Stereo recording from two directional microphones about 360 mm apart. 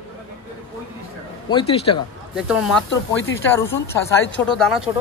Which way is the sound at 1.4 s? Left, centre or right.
Centre.